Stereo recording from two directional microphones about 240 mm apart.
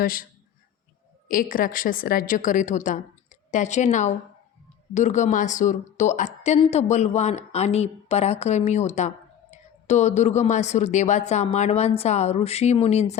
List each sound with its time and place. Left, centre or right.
0.0 s a woman's voice: left
1.3 s a woman's voice: left